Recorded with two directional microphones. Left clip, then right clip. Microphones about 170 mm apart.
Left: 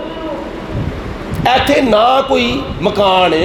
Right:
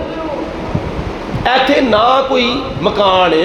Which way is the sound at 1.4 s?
40° left (ahead or behind).